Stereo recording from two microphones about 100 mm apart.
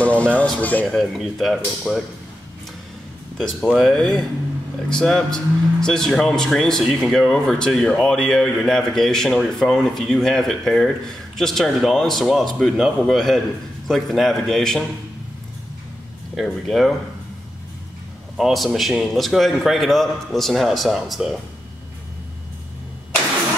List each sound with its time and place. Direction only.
0.0 s speech: 15° left (ahead or behind)
0.8 s speech: centre (ahead or behind)
3.3 s speech: 5° left (ahead or behind)
16.3 s speech: centre (ahead or behind)
18.3 s speech: centre (ahead or behind)